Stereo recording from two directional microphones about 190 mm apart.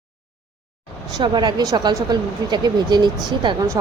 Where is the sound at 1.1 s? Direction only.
20° right (ahead or behind).